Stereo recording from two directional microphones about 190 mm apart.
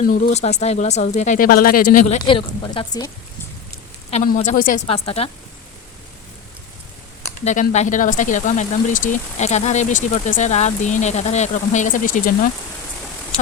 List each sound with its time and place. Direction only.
0.1 s speech: 45° left (ahead or behind)
2.2 s speech: 25° left (ahead or behind)
4.1 s a woman's voice: 35° left (ahead or behind)
4.9 s speech: 30° left (ahead or behind)
7.4 s speech: 40° left (ahead or behind)